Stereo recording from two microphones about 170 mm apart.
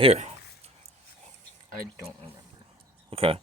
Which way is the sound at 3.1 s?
35° right (ahead or behind).